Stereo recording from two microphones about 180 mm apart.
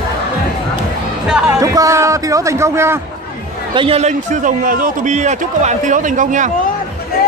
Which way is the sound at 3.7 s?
30° right (ahead or behind).